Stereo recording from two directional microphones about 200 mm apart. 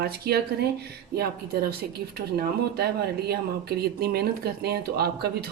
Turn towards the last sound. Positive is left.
turn(degrees=-50)  # may be behind; listen again after turning